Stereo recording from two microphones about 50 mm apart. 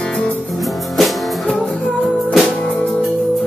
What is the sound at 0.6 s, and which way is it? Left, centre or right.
Music, centre.